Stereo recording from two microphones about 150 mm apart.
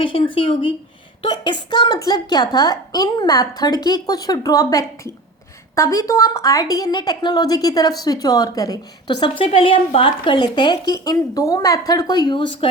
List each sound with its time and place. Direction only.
0.0 s a woman's voice: 35° left (ahead or behind)